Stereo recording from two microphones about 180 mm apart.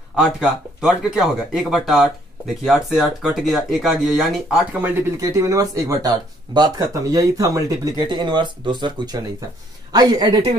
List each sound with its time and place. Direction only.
0.1 s speech: 5° right (ahead or behind)
4.8 s speech: 15° right (ahead or behind)